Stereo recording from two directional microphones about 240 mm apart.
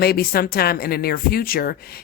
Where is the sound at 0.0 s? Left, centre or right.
Left.